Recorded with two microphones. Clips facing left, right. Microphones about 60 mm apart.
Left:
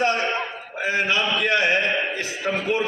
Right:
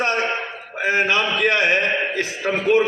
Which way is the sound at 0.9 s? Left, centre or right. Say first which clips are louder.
Right 3 dB; right.